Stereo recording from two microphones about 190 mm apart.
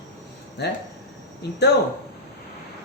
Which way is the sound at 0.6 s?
60° left (ahead or behind).